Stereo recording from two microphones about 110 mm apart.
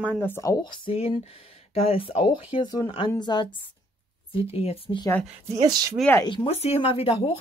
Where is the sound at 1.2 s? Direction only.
65° left (ahead or behind); by 3.4 s 40° left (ahead or behind).